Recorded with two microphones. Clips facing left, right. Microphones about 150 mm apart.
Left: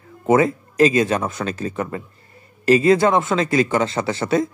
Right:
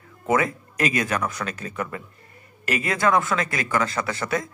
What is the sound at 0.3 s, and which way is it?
Speech, 30° left (ahead or behind).